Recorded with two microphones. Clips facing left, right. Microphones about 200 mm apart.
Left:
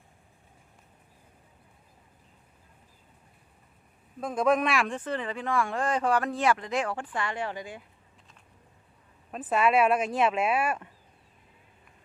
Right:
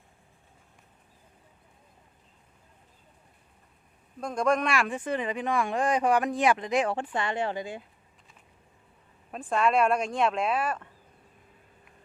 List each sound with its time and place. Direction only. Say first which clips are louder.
4.2 s speech: left 1 dB; 5° left (ahead or behind)
4.9 s speech: right 2 dB; 15° right (ahead or behind)
9.3 s speech: left 1 dB; 5° left (ahead or behind)